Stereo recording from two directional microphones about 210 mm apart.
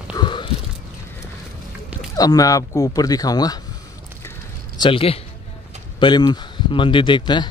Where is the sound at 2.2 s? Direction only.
15° left (ahead or behind).